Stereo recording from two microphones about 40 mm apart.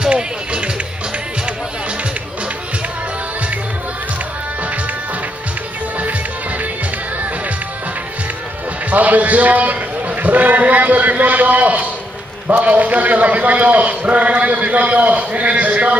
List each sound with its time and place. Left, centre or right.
0.1 s music: right
8.9 s a man's voice: right